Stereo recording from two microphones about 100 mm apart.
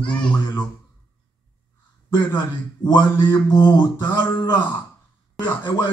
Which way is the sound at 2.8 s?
50° left (ahead or behind).